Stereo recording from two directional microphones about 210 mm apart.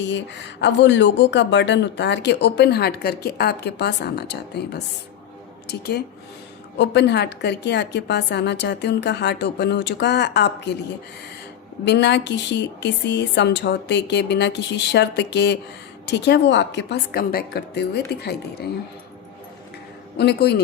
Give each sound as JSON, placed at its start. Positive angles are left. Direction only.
{"t": 0.0, "sound": "a woman's voice", "side_deg": 55}
{"t": 11.9, "sound": "a woman's voice", "side_deg": 55}
{"t": 20.1, "sound": "a woman's voice", "side_deg": 50}